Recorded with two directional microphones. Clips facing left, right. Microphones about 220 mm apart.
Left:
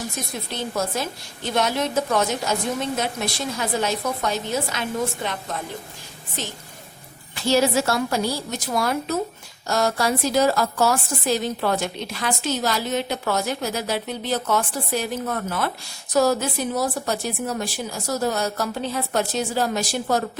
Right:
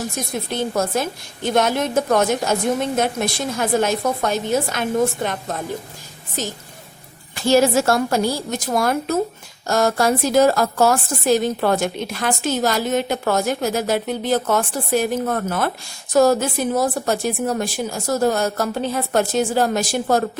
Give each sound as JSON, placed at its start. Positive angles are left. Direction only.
{"t": 0.5, "sound": "a woman's voice", "side_deg": -50}